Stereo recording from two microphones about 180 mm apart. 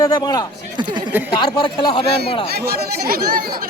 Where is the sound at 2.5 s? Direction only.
60° right (ahead or behind).